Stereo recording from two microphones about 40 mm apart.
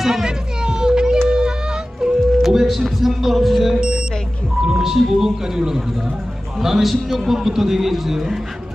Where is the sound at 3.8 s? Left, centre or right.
Centre.